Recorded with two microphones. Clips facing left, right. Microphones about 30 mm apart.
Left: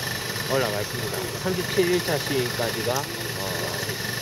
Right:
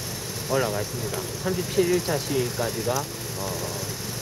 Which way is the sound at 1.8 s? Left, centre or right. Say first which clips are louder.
Even; left.